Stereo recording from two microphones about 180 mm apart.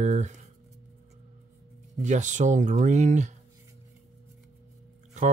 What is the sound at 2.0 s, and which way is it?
Speech, 45° right (ahead or behind).